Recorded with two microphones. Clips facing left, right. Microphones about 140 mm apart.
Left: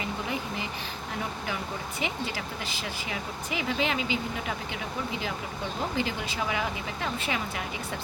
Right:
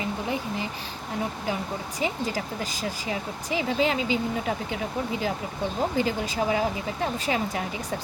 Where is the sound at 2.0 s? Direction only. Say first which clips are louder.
Right 5 dB; 40° right (ahead or behind).